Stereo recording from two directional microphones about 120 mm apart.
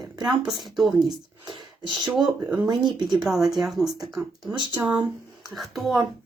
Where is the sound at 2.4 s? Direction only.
30° right (ahead or behind).